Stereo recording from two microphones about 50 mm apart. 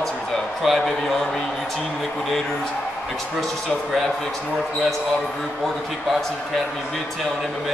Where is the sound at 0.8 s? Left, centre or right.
Centre.